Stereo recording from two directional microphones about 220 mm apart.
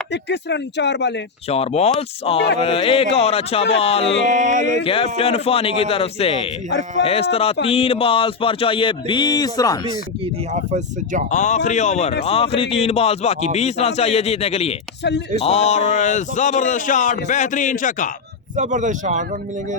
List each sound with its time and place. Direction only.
0.1 s speech: 50° left (ahead or behind)
1.5 s speech: 30° left (ahead or behind)
4.3 s speech: 35° right (ahead or behind)
4.8 s speech: 25° left (ahead or behind)
10.5 s speech: 35° right (ahead or behind)
11.3 s speech: 35° left (ahead or behind)
18.5 s speech: 35° right (ahead or behind)